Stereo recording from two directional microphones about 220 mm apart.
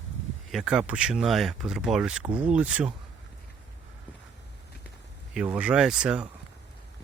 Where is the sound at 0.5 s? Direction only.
5° right (ahead or behind).